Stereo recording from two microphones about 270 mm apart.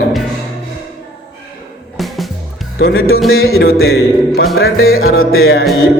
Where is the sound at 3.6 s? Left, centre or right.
Left.